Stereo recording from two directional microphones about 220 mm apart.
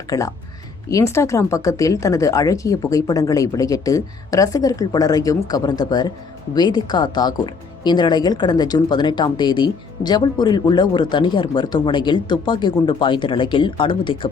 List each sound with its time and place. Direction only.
0.1 s speech: 15° left (ahead or behind)